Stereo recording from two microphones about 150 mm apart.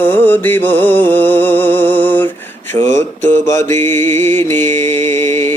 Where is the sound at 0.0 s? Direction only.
15° left (ahead or behind).